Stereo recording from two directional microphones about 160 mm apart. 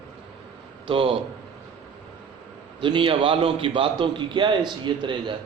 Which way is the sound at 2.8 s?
30° right (ahead or behind).